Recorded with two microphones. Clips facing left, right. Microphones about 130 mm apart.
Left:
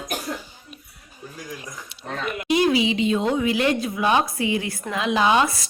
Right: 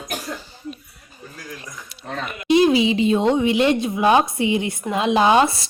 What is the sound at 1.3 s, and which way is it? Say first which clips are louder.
Speech: left 1 dB; 15° left (ahead or behind).